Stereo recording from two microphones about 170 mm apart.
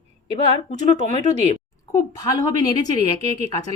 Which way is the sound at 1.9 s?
20° left (ahead or behind).